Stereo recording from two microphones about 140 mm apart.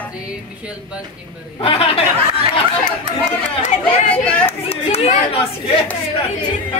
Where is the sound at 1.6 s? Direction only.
45° left (ahead or behind).